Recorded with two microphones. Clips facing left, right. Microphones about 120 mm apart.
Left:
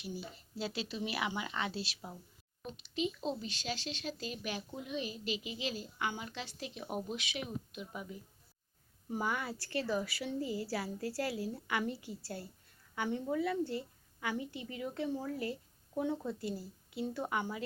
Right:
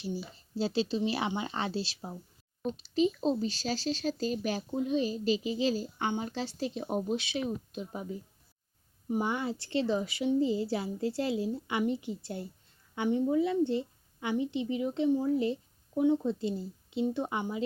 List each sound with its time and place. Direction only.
0.0 s speech: 30° right (ahead or behind)
9.0 s speech: 20° right (ahead or behind)